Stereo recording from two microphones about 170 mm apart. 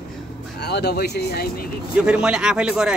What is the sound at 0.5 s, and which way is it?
Speech, 75° left (ahead or behind).